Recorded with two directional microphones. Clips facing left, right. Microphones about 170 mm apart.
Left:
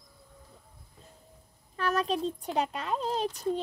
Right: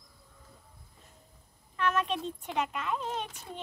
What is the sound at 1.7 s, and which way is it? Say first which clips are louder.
Speech: left 1 dB; 35° left (ahead or behind).